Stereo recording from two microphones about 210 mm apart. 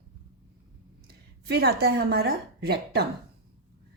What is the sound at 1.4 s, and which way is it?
A woman's voice, 50° right (ahead or behind).